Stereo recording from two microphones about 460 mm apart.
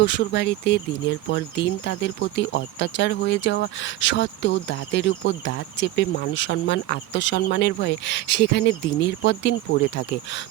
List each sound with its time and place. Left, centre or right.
0.0 s speech: left